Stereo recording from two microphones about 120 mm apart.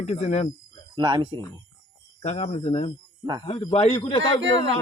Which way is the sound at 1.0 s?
45° right (ahead or behind).